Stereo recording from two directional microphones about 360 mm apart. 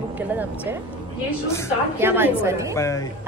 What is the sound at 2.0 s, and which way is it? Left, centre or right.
Speech, centre.